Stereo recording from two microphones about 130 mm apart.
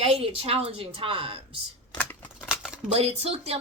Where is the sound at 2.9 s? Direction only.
50° right (ahead or behind).